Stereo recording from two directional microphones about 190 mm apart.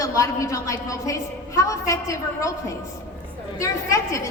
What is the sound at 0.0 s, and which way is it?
A woman's voice, 15° left (ahead or behind).